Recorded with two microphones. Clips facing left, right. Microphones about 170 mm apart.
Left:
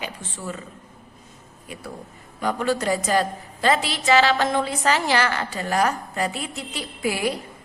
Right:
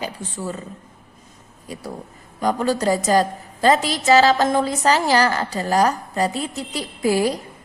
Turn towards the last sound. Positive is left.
turn(degrees=-40)  # may be behind; listen again after turning